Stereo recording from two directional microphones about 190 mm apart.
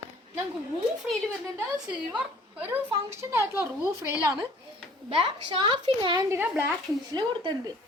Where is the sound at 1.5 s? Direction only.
10° right (ahead or behind).